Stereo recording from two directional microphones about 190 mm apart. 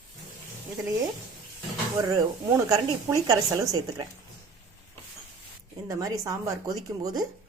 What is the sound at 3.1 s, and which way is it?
Speech, 20° right (ahead or behind).